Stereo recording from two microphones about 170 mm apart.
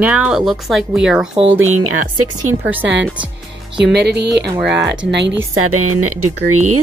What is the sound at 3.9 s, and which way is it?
Speech, 75° right (ahead or behind).